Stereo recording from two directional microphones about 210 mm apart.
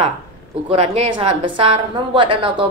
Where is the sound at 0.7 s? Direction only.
30° right (ahead or behind).